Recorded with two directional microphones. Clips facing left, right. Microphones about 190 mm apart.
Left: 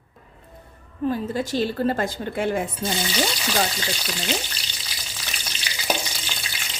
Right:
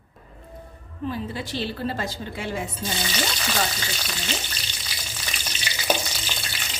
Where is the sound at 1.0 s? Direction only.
45° left (ahead or behind).